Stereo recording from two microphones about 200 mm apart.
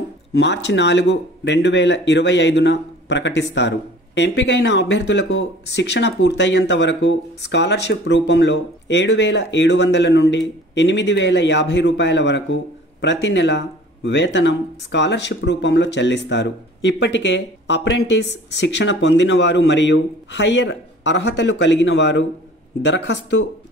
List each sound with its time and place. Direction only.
0.3 s speech: 60° left (ahead or behind)